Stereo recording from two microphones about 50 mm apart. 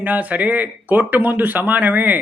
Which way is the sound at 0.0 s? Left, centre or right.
Right.